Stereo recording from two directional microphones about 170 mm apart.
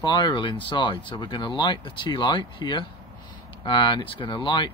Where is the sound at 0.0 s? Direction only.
25° left (ahead or behind).